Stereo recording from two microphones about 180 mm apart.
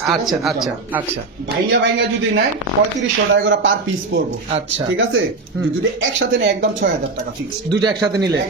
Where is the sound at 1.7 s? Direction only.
75° right (ahead or behind).